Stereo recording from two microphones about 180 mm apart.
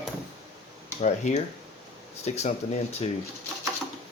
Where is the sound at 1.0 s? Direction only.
40° left (ahead or behind).